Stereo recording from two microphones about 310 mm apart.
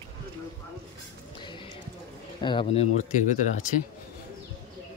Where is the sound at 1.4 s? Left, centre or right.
Centre.